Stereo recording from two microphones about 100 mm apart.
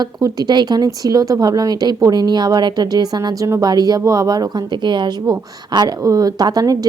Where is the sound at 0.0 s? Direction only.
40° right (ahead or behind).